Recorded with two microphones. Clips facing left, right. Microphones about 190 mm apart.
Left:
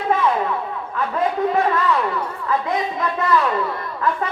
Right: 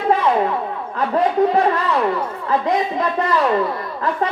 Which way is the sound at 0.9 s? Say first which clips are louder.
Right 5 dB; 35° right (ahead or behind).